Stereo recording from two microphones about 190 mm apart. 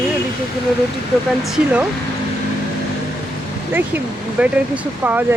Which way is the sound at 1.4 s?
5° right (ahead or behind).